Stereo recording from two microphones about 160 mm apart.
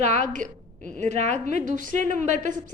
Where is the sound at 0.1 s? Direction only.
50° right (ahead or behind).